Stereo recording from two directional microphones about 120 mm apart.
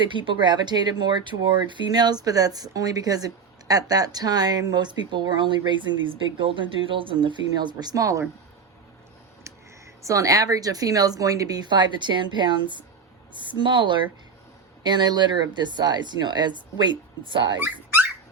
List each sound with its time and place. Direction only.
0.0 s speech: 40° right (ahead or behind)
10.0 s speech: 25° right (ahead or behind)